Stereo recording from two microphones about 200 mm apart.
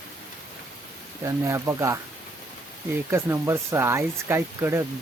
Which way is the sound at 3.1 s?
15° right (ahead or behind).